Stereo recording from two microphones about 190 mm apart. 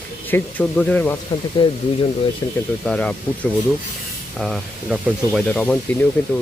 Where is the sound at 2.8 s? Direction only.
5° left (ahead or behind).